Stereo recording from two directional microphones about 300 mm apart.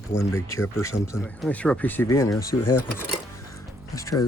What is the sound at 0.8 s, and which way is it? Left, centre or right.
Speech, centre.